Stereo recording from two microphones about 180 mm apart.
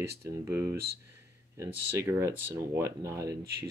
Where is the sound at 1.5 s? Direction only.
15° right (ahead or behind).